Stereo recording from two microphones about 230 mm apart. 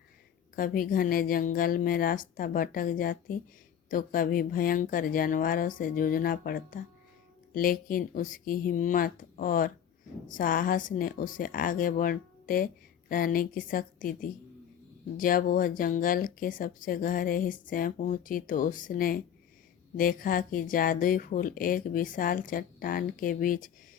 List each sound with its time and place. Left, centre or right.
0.5 s speech: left